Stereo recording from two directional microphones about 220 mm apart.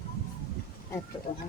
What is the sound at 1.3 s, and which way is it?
Speech, 30° left (ahead or behind).